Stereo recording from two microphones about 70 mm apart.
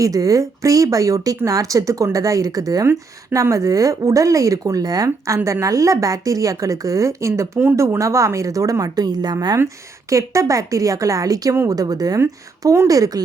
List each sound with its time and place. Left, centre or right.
0.0 s speech: right
2.8 s speech: right
10.1 s speech: right